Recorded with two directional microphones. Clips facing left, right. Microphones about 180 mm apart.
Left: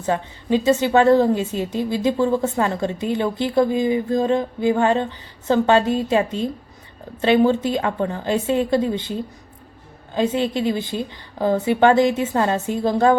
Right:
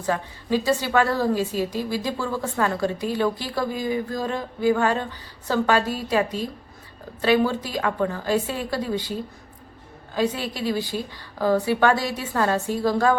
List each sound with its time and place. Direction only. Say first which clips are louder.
0.0 s a woman's voice: left 3 dB; 20° left (ahead or behind)
10.2 s a woman's voice: left 5 dB; 25° left (ahead or behind)